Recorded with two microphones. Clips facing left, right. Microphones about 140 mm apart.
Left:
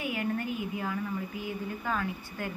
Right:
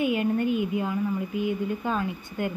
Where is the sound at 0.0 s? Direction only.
25° right (ahead or behind).